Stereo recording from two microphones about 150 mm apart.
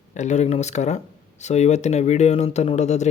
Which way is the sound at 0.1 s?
50° left (ahead or behind).